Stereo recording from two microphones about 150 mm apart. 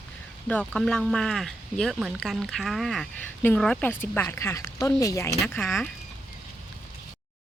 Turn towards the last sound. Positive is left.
turn(degrees=5)  # may be behind; listen again after turning